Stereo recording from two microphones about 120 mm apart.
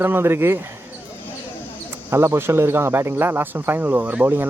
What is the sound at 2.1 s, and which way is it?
Speech, 20° right (ahead or behind).